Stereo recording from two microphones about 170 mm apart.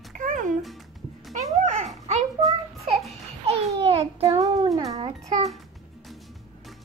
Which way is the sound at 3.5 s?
35° right (ahead or behind).